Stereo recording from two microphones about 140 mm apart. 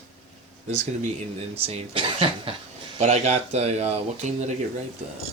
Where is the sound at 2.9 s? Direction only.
50° right (ahead or behind).